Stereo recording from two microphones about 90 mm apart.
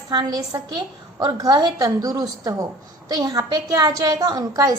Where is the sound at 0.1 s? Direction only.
50° right (ahead or behind).